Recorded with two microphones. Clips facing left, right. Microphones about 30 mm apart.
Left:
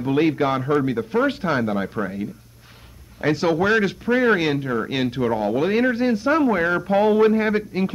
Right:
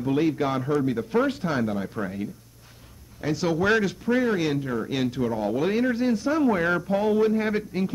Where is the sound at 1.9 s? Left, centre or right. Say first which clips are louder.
Left 4 dB; centre.